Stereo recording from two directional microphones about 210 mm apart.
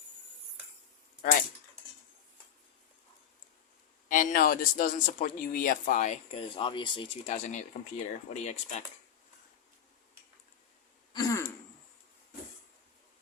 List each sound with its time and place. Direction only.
1.2 s speech: 40° left (ahead or behind)
4.1 s a man's voice: 40° left (ahead or behind)
6.6 s a man's voice: 25° left (ahead or behind)
11.1 s throat clearing: 15° left (ahead or behind)